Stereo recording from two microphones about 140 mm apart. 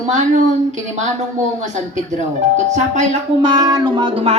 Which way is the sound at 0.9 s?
60° right (ahead or behind).